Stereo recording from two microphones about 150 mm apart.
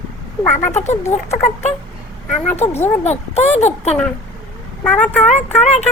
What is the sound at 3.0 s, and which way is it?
Speech, 50° left (ahead or behind).